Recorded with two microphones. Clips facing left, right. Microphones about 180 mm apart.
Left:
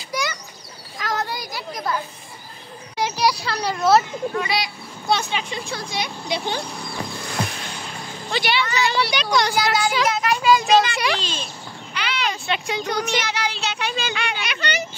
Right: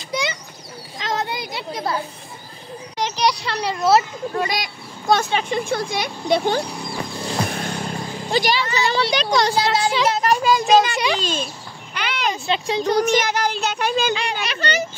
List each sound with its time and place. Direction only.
0.1 s a sound: 25° right (ahead or behind)
0.9 s children playing: 25° right (ahead or behind)
3.0 s speech: 5° left (ahead or behind)
4.3 s speech: 40° right (ahead or behind)
5.1 s speech: 50° right (ahead or behind)
11.9 s a sound: 50° right (ahead or behind)
12.4 s speech: 30° right (ahead or behind)
13.0 s speech: 45° right (ahead or behind)